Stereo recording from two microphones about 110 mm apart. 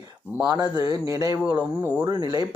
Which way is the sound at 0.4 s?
35° right (ahead or behind).